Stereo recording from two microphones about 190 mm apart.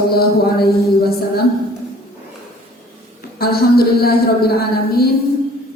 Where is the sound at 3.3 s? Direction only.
55° left (ahead or behind).